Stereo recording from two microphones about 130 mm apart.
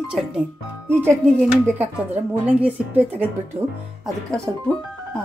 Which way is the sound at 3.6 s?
55° right (ahead or behind).